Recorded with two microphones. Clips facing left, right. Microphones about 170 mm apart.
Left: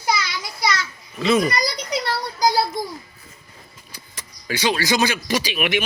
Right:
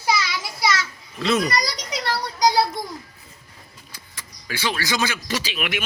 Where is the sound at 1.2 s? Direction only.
Centre (ahead or behind).